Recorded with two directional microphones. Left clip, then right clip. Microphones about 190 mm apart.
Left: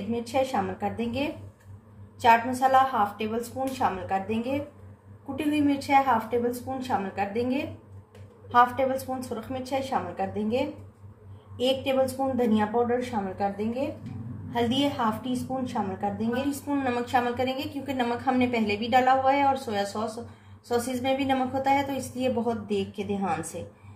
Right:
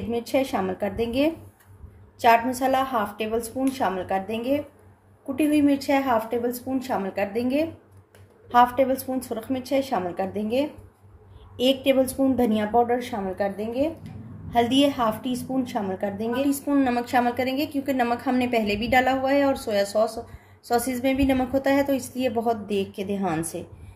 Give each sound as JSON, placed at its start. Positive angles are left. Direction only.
{"t": 0.1, "sound": "a woman's voice", "side_deg": -60}
{"t": 8.7, "sound": "a woman's voice", "side_deg": -60}